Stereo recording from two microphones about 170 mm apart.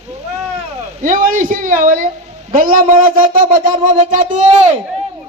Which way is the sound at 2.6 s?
55° right (ahead or behind).